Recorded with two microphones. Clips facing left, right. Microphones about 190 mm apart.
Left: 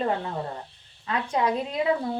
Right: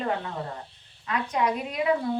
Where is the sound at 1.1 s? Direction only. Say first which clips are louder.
Left 1 dB; 30° left (ahead or behind).